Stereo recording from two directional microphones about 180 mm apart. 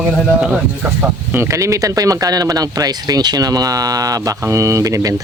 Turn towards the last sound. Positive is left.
turn(degrees=-15)  # may be behind; listen again after turning